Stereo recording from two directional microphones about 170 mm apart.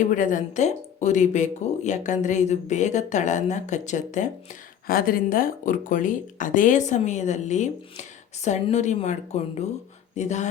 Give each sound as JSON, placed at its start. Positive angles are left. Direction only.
{"t": 0.1, "sound": "speech", "side_deg": 50}
{"t": 4.9, "sound": "speech", "side_deg": 60}